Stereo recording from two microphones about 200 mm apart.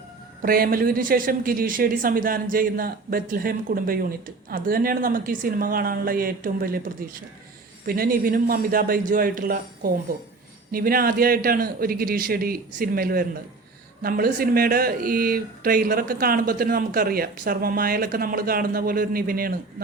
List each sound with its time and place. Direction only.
0.4 s speech: 45° right (ahead or behind)